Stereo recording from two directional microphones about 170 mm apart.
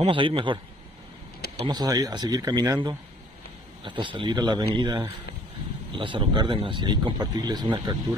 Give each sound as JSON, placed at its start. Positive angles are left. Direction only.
{"t": 0.0, "sound": "a man's voice", "side_deg": -30}
{"t": 1.7, "sound": "speech", "side_deg": -20}
{"t": 3.8, "sound": "speech", "side_deg": -30}